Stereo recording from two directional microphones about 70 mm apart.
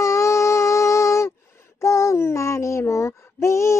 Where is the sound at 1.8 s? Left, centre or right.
Left.